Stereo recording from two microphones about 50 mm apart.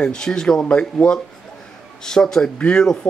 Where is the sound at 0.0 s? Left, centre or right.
Centre.